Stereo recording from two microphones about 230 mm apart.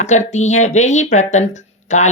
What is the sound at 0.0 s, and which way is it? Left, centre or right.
Speech, left.